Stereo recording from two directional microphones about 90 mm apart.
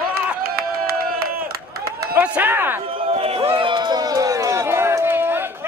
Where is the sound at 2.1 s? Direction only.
15° right (ahead or behind).